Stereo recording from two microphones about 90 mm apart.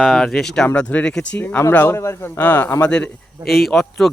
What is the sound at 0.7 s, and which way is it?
Speech, 15° left (ahead or behind).